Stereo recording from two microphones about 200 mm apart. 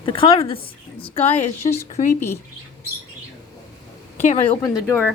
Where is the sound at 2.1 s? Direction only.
10° left (ahead or behind).